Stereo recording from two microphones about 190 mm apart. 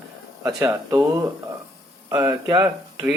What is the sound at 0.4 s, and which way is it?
Speech, 15° right (ahead or behind).